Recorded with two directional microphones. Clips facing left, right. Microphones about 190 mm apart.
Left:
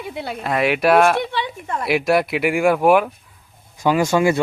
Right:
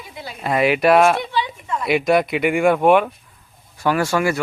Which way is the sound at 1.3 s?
55° left (ahead or behind).